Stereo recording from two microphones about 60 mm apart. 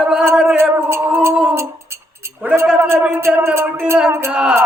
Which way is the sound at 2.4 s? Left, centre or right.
Right.